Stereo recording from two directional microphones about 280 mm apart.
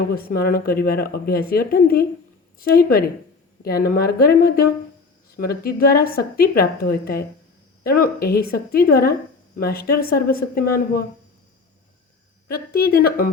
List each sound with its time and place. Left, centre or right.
0.2 s a woman's voice: left
12.5 s a woman's voice: left